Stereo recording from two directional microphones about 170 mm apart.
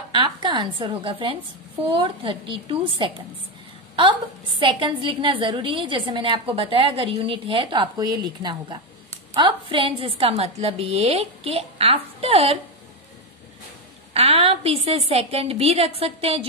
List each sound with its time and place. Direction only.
0.1 s a woman's voice: 25° right (ahead or behind)
14.1 s a woman's voice: 35° right (ahead or behind)